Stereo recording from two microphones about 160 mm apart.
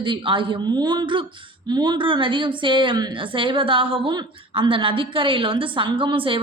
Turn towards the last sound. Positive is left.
turn(degrees=-35)  # may be behind; listen again after turning